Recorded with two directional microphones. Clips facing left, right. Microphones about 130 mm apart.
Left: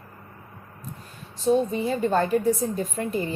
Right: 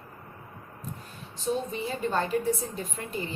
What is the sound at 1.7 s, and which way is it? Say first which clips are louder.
A woman's voice: left 6 dB; 40° left (ahead or behind).